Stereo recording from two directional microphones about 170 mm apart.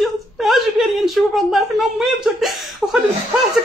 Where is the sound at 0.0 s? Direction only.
Centre (ahead or behind).